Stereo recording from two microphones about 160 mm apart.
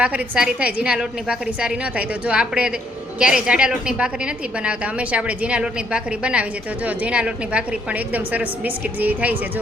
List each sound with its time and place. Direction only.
0.0 s a woman's voice: 10° right (ahead or behind)